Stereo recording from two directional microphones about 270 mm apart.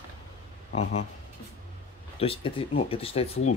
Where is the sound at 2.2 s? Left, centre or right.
Centre.